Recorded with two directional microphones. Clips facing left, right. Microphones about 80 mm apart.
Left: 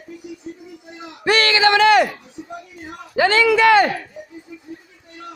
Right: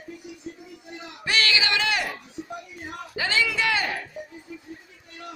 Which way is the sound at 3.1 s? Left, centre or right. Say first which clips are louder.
Left 11 dB; left.